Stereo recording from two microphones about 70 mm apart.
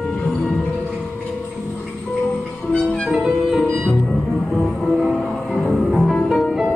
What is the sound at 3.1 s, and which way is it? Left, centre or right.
Music, centre.